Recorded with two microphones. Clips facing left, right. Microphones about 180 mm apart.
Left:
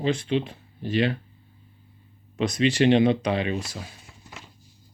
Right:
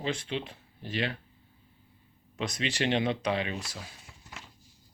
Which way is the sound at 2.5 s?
20° left (ahead or behind).